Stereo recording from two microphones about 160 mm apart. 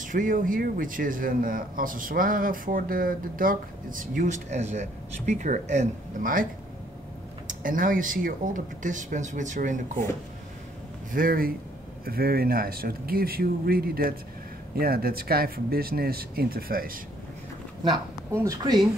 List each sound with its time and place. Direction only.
0.0 s speech: 55° right (ahead or behind)
7.4 s speech: 60° right (ahead or behind)
11.1 s speech: 60° right (ahead or behind)
18.3 s speech: 20° right (ahead or behind)